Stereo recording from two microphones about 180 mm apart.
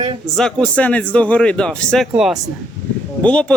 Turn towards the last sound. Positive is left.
turn(degrees=5)  # may be behind; listen again after turning